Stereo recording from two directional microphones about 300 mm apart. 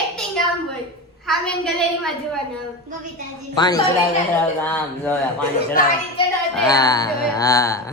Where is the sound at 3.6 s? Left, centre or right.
Centre.